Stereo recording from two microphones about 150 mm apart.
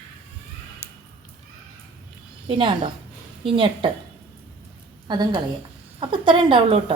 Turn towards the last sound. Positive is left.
turn(degrees=-35)  # may be behind; listen again after turning